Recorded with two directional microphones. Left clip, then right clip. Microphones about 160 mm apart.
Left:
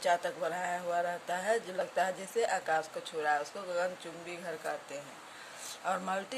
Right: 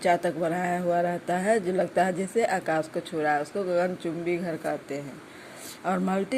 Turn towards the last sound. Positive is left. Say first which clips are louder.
# right 7 dB
turn(degrees=-25)  # may be behind; listen again after turning